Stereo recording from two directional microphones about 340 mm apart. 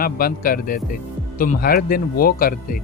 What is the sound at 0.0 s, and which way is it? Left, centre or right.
Speech, left.